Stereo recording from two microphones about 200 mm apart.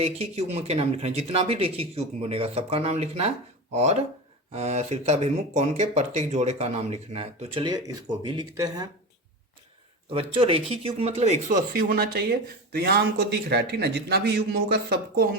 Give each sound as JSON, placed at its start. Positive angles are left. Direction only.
{"t": 0.0, "sound": "speech", "side_deg": -30}
{"t": 4.5, "sound": "speech", "side_deg": -30}
{"t": 10.1, "sound": "speech", "side_deg": -30}